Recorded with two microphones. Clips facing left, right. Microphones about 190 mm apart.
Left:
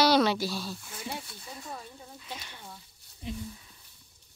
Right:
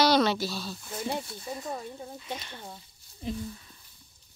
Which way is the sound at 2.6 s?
25° right (ahead or behind).